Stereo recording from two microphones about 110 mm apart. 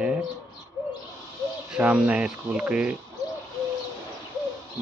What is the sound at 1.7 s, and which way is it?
Speech, 10° right (ahead or behind).